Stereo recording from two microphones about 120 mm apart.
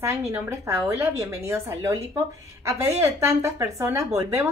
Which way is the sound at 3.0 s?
25° right (ahead or behind).